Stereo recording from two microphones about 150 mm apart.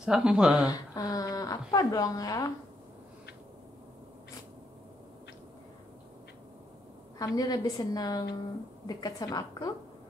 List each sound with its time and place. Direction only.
0.0 s speech: 5° right (ahead or behind)
0.7 s speech: 25° left (ahead or behind)
7.2 s speech: 25° left (ahead or behind)